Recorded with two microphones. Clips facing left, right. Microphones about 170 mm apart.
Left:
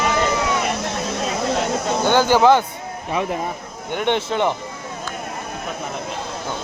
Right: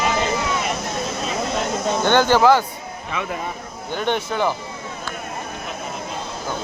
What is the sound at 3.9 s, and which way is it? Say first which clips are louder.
Speech: left 2 dB; 25° left (ahead or behind).